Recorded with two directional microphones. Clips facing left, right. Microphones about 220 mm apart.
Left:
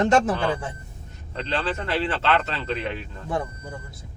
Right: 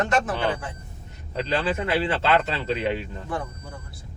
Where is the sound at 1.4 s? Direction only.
10° right (ahead or behind).